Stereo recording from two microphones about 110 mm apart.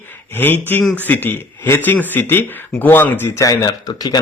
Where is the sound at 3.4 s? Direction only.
35° left (ahead or behind).